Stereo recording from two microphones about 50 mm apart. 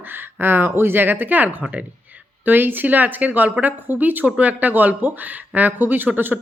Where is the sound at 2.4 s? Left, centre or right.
Right.